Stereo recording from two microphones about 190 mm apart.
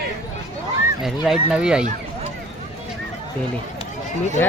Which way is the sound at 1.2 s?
5° right (ahead or behind).